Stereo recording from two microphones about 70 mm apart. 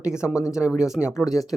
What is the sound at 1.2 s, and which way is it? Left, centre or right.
Speech, left.